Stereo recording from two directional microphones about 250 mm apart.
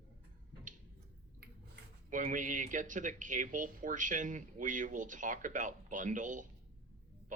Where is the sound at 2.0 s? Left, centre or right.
Right.